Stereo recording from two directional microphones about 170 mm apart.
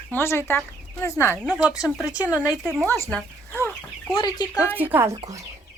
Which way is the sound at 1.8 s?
5° right (ahead or behind).